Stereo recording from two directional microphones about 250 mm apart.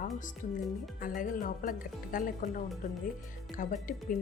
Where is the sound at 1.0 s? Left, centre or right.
Left.